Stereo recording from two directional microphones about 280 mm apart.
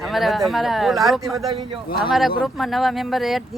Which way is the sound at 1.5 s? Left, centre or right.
Centre.